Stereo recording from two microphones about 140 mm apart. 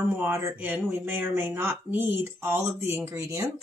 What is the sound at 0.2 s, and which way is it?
Speech, 15° right (ahead or behind).